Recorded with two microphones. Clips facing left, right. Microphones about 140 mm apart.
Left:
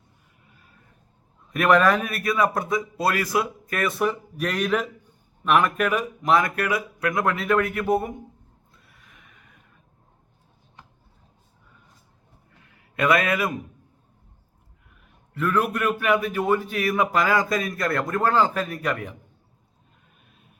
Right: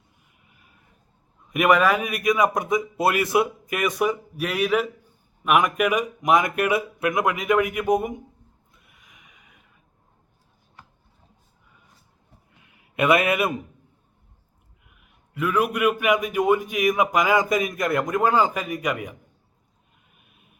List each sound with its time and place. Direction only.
1.5 s a man's voice: 15° right (ahead or behind)
8.7 s neigh: 15° right (ahead or behind)
12.6 s a sound: 20° right (ahead or behind)
15.4 s a man's voice: 10° right (ahead or behind)